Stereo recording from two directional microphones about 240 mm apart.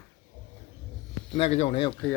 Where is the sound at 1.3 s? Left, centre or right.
Left.